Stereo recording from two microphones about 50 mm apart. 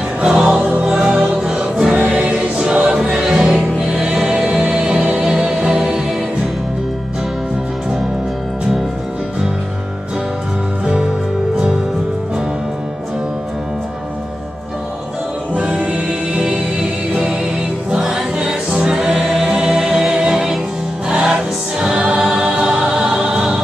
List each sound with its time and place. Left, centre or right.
0.2 s music: centre
2.0 s choir: right
2.5 s music: centre
15.5 s music: right